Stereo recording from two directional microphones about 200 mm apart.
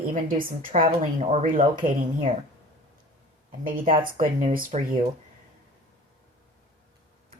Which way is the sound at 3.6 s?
45° right (ahead or behind).